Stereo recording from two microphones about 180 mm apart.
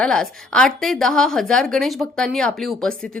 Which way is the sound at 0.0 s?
5° left (ahead or behind).